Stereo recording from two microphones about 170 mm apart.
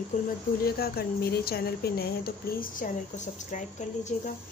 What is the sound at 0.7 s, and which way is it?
Speech, 65° left (ahead or behind).